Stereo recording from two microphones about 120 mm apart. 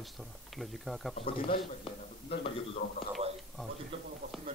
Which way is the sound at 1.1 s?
50° left (ahead or behind).